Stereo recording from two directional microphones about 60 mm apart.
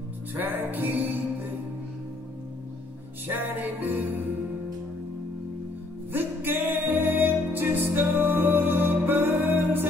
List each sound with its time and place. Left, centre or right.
0.3 s music: right
3.3 s music: right
6.1 s music: right